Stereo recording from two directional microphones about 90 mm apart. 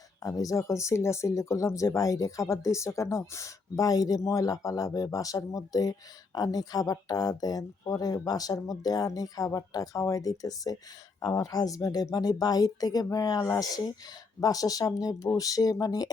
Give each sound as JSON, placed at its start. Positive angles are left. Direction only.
{"t": 0.2, "sound": "speech", "side_deg": 40}